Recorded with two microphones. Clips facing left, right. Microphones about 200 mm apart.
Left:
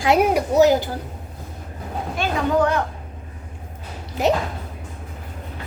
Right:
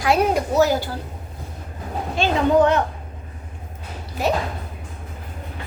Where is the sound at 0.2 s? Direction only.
15° left (ahead or behind).